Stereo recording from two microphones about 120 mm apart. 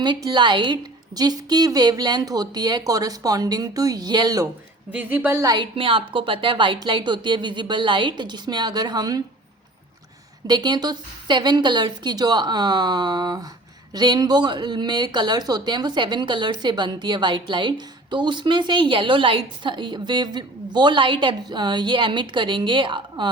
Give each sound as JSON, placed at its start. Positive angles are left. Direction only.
{"t": 0.0, "sound": "speech", "side_deg": -35}
{"t": 4.9, "sound": "speech", "side_deg": -15}
{"t": 5.5, "sound": "a woman's voice", "side_deg": -45}
{"t": 10.4, "sound": "speech", "side_deg": -35}